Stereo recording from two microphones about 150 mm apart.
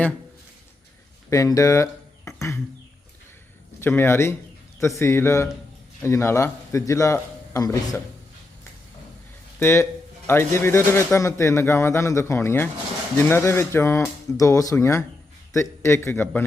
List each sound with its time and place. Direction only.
1.3 s speech: 20° left (ahead or behind)
3.8 s a man's voice: 15° left (ahead or behind)
9.6 s a man's voice: 15° left (ahead or behind)